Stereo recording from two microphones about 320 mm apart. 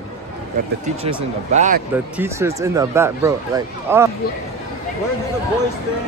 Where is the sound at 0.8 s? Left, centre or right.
Centre.